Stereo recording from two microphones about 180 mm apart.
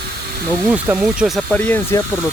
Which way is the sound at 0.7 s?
5° right (ahead or behind).